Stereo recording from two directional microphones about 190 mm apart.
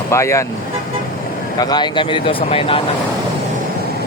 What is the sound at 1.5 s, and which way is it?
A man's voice, 20° left (ahead or behind).